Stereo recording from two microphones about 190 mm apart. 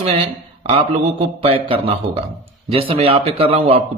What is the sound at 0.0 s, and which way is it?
A man's voice, 30° right (ahead or behind).